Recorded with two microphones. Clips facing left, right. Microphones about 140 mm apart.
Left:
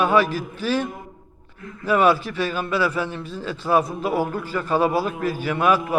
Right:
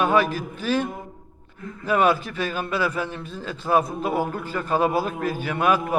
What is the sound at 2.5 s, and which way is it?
Speech, 45° right (ahead or behind).